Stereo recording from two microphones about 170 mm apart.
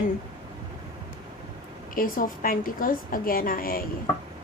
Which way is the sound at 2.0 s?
55° left (ahead or behind).